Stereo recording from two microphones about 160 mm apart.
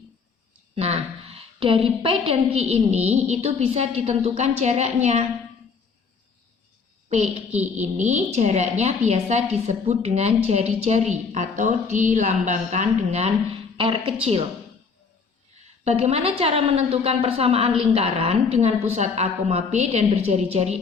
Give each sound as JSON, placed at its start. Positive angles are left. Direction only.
{"t": 0.8, "sound": "a woman's voice", "side_deg": -40}
{"t": 7.1, "sound": "a woman's voice", "side_deg": -45}
{"t": 15.8, "sound": "a woman's voice", "side_deg": -40}